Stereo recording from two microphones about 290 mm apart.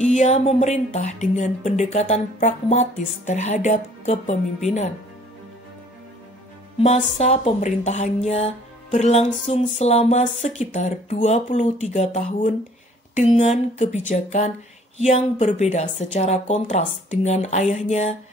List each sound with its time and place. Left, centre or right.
0.0 s a woman's voice: left
6.8 s a woman's voice: left